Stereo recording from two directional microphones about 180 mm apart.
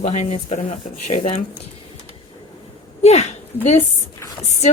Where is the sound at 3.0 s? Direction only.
35° left (ahead or behind).